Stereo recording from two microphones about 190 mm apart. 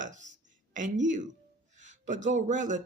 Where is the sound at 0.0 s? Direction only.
40° right (ahead or behind).